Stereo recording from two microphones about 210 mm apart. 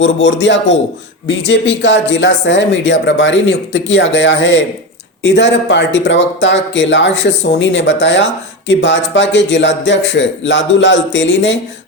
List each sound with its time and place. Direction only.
0.0 s speech: 60° left (ahead or behind)